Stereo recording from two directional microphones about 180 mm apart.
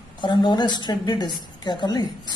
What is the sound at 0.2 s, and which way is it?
A woman's voice, 25° left (ahead or behind).